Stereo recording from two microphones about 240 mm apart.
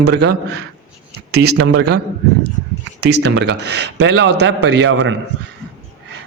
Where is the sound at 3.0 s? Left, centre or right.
Right.